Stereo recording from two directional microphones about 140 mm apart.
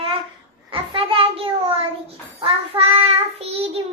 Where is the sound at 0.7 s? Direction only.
40° right (ahead or behind).